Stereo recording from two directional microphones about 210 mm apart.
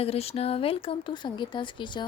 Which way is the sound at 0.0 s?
30° left (ahead or behind).